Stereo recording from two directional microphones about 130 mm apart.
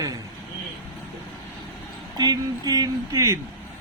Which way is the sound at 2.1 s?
30° right (ahead or behind).